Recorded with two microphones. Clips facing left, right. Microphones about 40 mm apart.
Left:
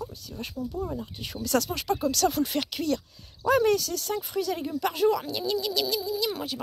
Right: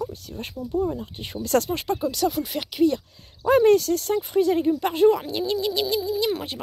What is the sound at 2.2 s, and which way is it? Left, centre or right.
Speech, centre.